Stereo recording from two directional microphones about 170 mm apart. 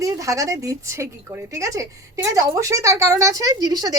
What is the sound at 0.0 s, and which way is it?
A woman's voice, 20° right (ahead or behind).